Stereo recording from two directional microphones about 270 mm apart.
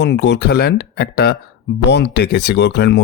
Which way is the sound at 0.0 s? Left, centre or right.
Left.